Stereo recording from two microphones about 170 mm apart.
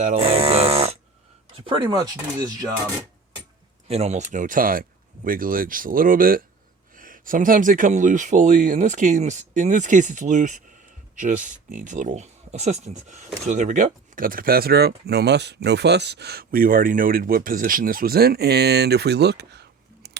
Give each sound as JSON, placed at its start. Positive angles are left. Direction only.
{"t": 0.0, "sound": "speech", "side_deg": -40}
{"t": 3.8, "sound": "speech", "side_deg": -40}